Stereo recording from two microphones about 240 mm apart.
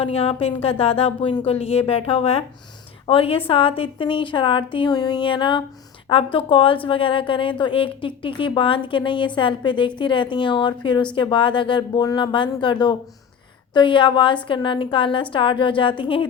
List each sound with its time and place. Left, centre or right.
0.0 s a woman's voice: left